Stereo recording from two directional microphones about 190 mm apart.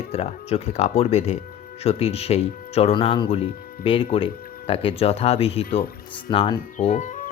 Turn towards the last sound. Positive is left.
turn(degrees=40)  # may be behind; listen again after turning